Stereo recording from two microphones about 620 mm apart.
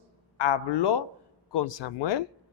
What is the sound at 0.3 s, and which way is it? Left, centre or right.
Speech, left.